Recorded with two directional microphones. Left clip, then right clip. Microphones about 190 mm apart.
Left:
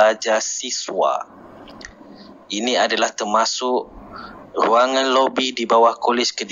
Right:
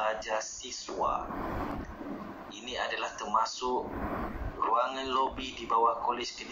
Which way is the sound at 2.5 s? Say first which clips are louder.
Left 17 dB; 50° left (ahead or behind).